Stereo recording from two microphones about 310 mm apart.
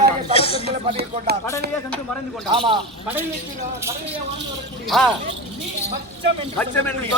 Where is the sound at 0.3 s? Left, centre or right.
Centre.